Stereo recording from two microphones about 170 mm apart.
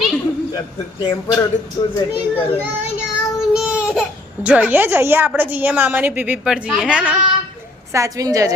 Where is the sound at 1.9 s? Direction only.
30° left (ahead or behind).